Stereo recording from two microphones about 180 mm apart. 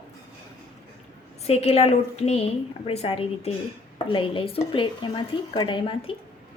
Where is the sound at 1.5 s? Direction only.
35° left (ahead or behind).